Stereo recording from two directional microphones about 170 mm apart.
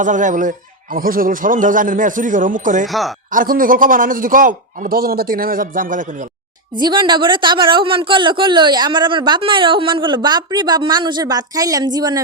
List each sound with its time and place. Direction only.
0.0 s speech: 45° right (ahead or behind)
2.8 s speech: centre (ahead or behind)
3.3 s a man's voice: 55° right (ahead or behind)
6.7 s speech: 25° right (ahead or behind)